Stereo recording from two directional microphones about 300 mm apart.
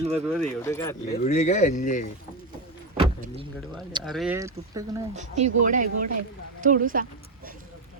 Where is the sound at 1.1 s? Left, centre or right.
Left.